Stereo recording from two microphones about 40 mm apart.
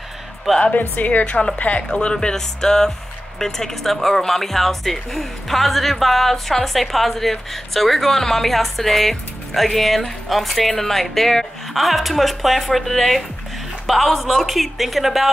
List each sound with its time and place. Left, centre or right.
0.7 s a woman's voice: left
1.2 s speech: left
1.6 s speech: left
1.9 s speech: left; by 15.2 s centre